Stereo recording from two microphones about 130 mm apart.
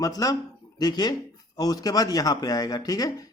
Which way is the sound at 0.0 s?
25° left (ahead or behind).